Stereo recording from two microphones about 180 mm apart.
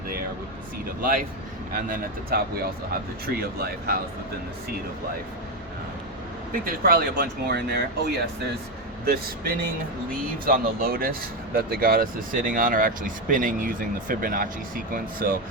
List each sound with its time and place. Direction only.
0.9 s speech: 50° right (ahead or behind)
6.5 s speech: 55° right (ahead or behind)
9.0 s speech: 55° right (ahead or behind)